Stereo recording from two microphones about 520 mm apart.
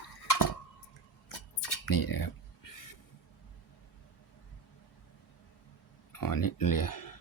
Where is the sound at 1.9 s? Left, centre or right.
Left.